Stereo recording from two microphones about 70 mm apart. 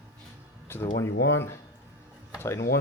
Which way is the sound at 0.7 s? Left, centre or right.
Left.